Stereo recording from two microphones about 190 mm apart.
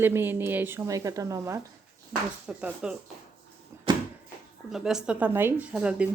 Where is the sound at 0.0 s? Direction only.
10° right (ahead or behind).